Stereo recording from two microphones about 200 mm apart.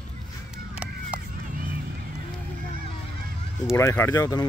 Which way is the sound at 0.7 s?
5° right (ahead or behind).